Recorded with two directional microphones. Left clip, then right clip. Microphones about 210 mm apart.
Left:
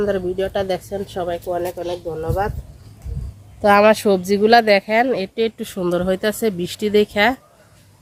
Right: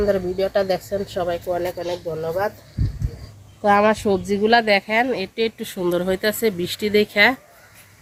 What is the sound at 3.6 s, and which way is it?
Speech, 40° left (ahead or behind).